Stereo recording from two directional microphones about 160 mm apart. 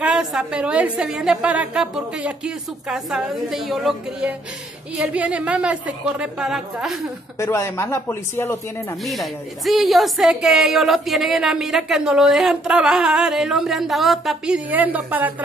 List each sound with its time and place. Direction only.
0.0 s a woman's voice: 5° right (ahead or behind)
7.3 s speech: 15° left (ahead or behind)
9.0 s a woman's voice: centre (ahead or behind)